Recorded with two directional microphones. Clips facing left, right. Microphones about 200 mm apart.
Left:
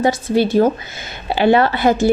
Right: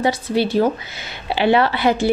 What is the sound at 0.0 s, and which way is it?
A woman's voice, 45° left (ahead or behind).